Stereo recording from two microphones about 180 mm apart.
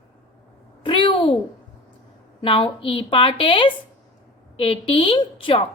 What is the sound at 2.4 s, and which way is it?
A woman's voice, 30° left (ahead or behind).